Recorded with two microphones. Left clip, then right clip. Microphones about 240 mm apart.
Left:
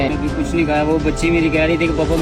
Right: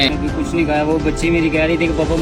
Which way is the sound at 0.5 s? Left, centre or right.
Centre.